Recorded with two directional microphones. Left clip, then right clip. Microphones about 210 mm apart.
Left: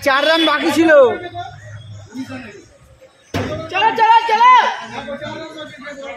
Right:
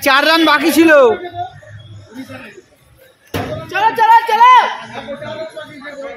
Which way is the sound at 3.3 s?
45° right (ahead or behind).